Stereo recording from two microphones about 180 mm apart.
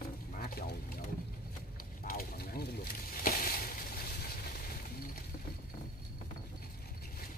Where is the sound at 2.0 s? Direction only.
55° left (ahead or behind).